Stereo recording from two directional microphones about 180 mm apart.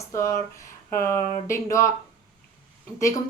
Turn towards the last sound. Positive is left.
turn(degrees=20)  # may be behind; listen again after turning